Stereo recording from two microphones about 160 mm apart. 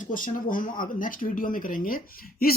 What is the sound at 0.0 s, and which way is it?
Speech, 55° left (ahead or behind).